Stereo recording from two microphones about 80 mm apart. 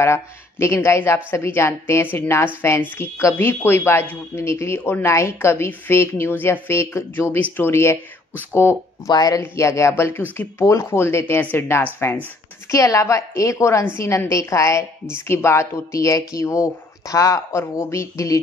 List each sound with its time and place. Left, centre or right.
0.0 s a woman's voice: left
9.1 s speech: left
9.4 s a woman's voice: left
12.7 s a woman's voice: left